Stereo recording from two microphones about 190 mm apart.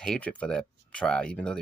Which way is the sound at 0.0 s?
5° left (ahead or behind).